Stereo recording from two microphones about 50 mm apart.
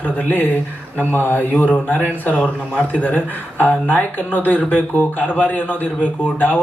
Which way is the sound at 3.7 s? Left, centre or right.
Left.